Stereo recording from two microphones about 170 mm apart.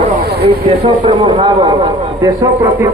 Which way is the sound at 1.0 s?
30° right (ahead or behind).